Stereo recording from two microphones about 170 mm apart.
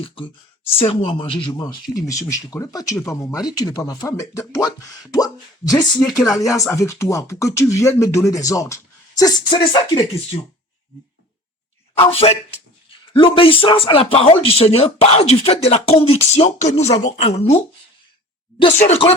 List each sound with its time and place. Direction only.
0.8 s speech: 30° left (ahead or behind)
2.0 s speech: 20° left (ahead or behind)
11.9 s speech: 35° left (ahead or behind)
18.6 s speech: 35° left (ahead or behind)